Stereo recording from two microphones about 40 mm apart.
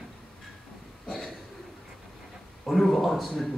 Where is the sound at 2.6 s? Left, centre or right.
Centre.